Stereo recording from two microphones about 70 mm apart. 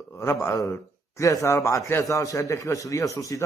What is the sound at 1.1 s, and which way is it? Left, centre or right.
A man's voice, left.